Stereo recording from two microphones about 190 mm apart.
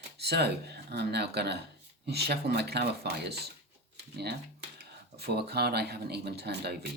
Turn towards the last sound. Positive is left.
turn(degrees=-60)  # may be behind; listen again after turning